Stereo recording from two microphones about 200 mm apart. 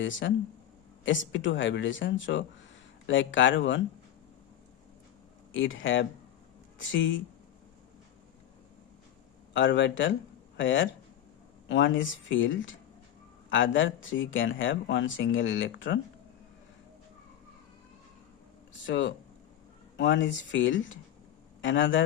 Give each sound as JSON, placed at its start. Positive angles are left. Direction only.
{"t": 0.0, "sound": "speech", "side_deg": 70}
{"t": 5.5, "sound": "speech", "side_deg": 75}
{"t": 9.5, "sound": "speech", "side_deg": 65}
{"t": 18.9, "sound": "speech", "side_deg": 65}